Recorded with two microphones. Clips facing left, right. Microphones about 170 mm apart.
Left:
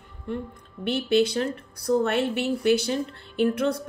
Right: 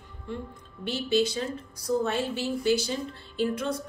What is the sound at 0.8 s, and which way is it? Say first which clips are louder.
Speech: left 4 dB; 60° left (ahead or behind).